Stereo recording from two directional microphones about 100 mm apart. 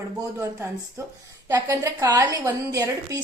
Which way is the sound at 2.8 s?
40° right (ahead or behind).